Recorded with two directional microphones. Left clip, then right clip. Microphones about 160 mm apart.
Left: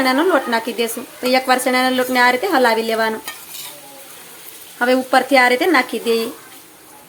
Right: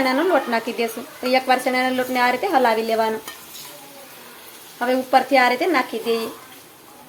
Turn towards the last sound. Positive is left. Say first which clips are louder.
# left 4 dB
turn(degrees=25)  # may be behind; listen again after turning